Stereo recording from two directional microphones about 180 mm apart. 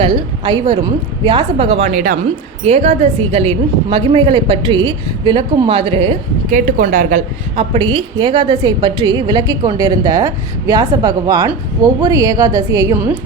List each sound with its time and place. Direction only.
0.0 s a woman's voice: 30° right (ahead or behind)
6.5 s a woman's voice: 45° right (ahead or behind); by 13.1 s 10° right (ahead or behind)